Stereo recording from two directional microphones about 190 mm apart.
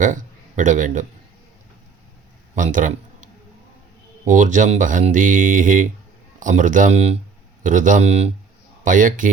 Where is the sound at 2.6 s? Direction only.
45° right (ahead or behind).